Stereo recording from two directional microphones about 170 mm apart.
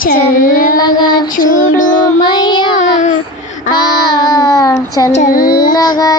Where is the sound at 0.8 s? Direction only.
25° left (ahead or behind).